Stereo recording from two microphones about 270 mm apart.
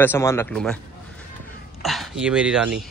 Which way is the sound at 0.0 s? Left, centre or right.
Centre.